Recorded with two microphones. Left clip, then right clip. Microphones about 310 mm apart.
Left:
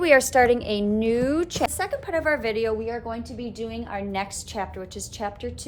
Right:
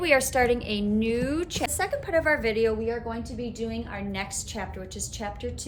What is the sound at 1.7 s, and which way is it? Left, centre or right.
A woman's voice, centre.